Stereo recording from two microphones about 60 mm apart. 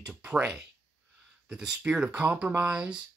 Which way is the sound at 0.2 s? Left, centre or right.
Centre.